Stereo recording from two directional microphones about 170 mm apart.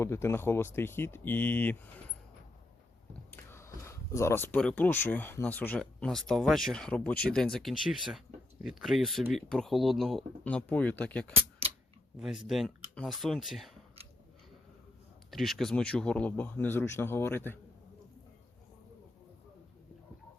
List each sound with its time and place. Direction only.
0.0 s speech: 15° left (ahead or behind)
3.3 s speech: 15° left (ahead or behind)
11.6 s a sound: 35° right (ahead or behind)
12.1 s speech: 5° right (ahead or behind)
15.3 s speech: centre (ahead or behind)